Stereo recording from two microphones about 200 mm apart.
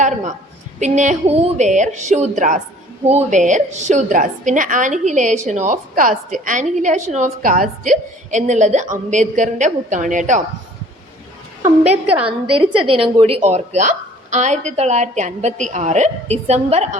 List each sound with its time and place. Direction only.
0.8 s a woman's voice: 35° right (ahead or behind)
11.9 s a woman's voice: 5° right (ahead or behind)
12.5 s a woman's voice: 25° right (ahead or behind)